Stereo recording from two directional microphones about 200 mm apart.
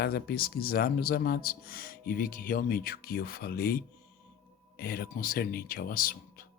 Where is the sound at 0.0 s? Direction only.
50° left (ahead or behind).